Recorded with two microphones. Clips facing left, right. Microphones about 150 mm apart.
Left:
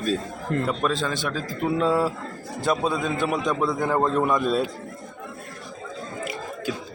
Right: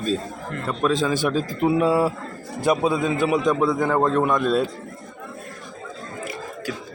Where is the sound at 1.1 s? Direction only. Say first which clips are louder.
Right 6 dB; 15° right (ahead or behind); by 4.6 s centre (ahead or behind).